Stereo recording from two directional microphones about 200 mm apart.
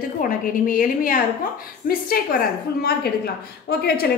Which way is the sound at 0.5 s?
45° left (ahead or behind).